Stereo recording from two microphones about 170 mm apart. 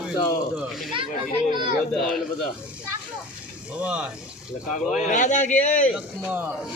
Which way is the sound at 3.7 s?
5° right (ahead or behind).